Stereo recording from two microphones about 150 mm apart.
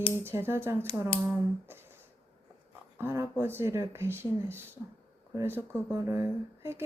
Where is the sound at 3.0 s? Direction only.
15° right (ahead or behind).